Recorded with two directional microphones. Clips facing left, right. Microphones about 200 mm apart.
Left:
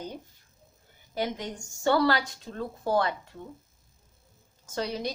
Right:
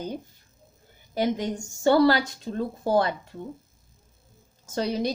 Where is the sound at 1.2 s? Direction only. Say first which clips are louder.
Right 6 dB; 35° right (ahead or behind).